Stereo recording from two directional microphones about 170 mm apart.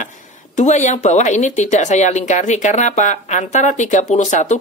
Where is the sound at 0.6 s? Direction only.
45° left (ahead or behind).